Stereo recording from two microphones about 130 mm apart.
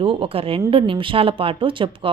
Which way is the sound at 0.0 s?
40° right (ahead or behind).